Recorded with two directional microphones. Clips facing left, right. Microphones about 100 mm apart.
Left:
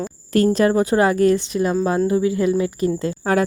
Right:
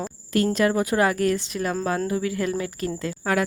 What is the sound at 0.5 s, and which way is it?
Speech, 30° left (ahead or behind).